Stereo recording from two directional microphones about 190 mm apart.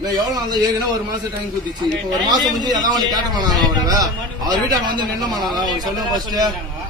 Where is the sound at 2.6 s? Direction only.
20° right (ahead or behind).